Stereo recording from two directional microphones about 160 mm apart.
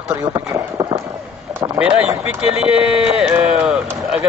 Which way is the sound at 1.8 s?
10° right (ahead or behind).